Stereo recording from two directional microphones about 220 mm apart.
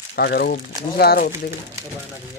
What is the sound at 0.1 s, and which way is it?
Speech, 45° left (ahead or behind).